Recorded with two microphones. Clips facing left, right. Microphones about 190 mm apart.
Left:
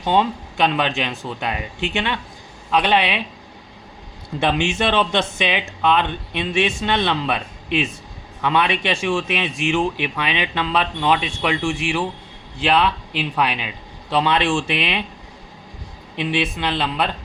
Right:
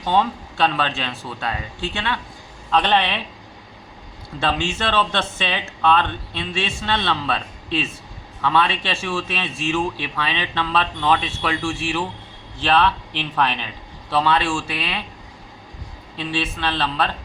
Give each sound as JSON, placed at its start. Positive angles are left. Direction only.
{"t": 0.0, "sound": "a man's voice", "side_deg": 15}
{"t": 4.4, "sound": "a man's voice", "side_deg": 15}
{"t": 16.1, "sound": "a man's voice", "side_deg": 15}